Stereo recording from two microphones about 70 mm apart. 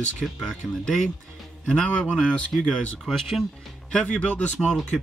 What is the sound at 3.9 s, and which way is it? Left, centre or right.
Speech, centre.